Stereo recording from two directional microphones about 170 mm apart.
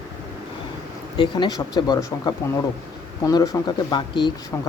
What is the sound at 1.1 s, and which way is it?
Speech, 25° left (ahead or behind).